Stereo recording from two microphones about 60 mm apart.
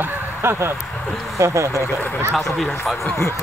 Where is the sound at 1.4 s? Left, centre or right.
Right.